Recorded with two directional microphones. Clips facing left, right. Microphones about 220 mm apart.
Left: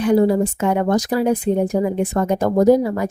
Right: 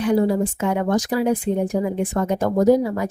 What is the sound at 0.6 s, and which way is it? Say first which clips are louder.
Speech: left 3 dB; 45° left (ahead or behind).